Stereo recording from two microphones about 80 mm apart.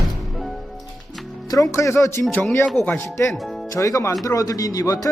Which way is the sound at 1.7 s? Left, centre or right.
Left.